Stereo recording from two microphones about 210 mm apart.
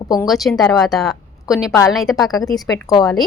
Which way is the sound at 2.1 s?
15° left (ahead or behind).